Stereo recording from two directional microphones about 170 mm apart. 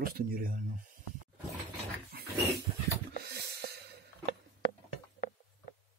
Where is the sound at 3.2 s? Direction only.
70° right (ahead or behind).